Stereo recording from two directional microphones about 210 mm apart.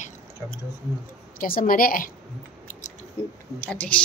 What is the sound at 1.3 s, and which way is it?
Speech, 45° left (ahead or behind).